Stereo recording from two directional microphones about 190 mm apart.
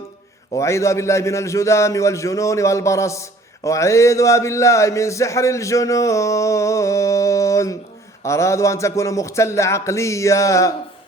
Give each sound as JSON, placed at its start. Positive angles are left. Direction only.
{"t": 0.5, "sound": "a man's voice", "side_deg": 15}